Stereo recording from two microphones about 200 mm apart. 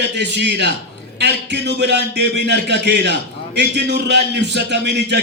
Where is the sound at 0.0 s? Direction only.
60° right (ahead or behind).